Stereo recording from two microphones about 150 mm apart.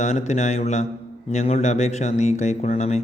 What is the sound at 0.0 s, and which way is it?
Speech, 50° left (ahead or behind).